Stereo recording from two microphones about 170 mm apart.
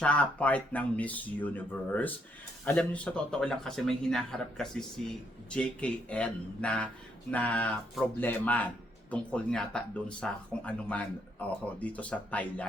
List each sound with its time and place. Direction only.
0.0 s speech: 5° left (ahead or behind)